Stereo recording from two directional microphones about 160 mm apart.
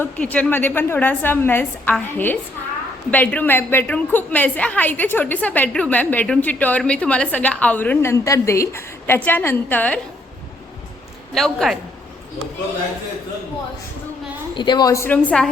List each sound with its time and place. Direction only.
0.0 s a woman's voice: 10° left (ahead or behind)
11.3 s a woman's voice: centre (ahead or behind)
14.5 s a woman's voice: 30° left (ahead or behind); by 15.4 s 10° left (ahead or behind)